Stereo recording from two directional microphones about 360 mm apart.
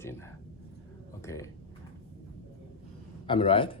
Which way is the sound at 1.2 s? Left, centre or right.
Centre.